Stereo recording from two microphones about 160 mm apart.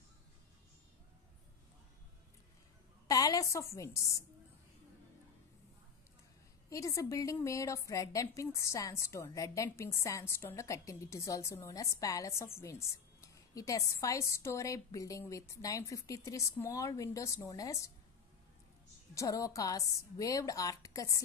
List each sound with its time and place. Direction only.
3.1 s a woman's voice: 20° left (ahead or behind)
6.7 s a woman's voice: 20° left (ahead or behind)
19.1 s a woman's voice: 20° left (ahead or behind)